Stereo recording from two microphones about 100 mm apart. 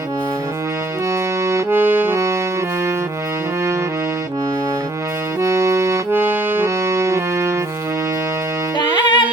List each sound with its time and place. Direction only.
1.5 s accordion: 25° right (ahead or behind)
5.4 s accordion: 30° right (ahead or behind)
8.8 s music: 45° left (ahead or behind)